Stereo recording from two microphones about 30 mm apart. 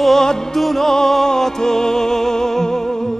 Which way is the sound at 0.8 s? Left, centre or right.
Centre.